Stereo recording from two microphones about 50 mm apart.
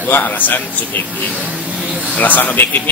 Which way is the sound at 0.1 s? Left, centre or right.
Left.